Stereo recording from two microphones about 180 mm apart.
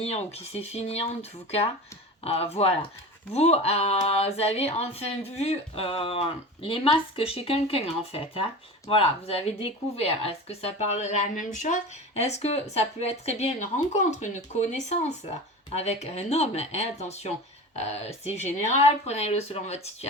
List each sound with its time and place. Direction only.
0.0 s speech: 35° left (ahead or behind)